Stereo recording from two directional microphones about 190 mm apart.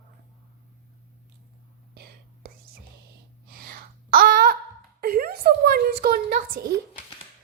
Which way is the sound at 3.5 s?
50° right (ahead or behind).